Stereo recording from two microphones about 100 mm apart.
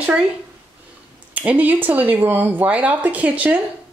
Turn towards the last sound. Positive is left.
turn(degrees=-15)  # may be behind; listen again after turning